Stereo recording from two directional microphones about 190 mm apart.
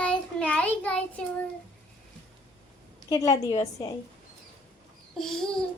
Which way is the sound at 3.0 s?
20° left (ahead or behind).